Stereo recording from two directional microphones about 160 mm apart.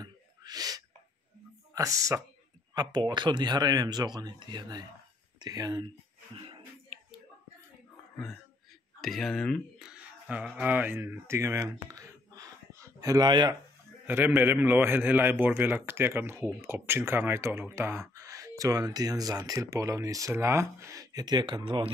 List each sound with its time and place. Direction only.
0.0 s a sound: 25° right (ahead or behind)
1.7 s speech: 20° right (ahead or behind)
9.0 s speech: centre (ahead or behind); by 13.6 s 25° right (ahead or behind)
14.0 s a man's voice: 10° right (ahead or behind); by 21.9 s 30° right (ahead or behind)